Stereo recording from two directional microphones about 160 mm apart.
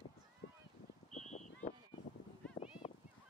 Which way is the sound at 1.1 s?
50° left (ahead or behind).